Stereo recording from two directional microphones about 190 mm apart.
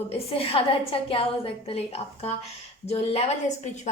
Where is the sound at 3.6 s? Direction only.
40° left (ahead or behind).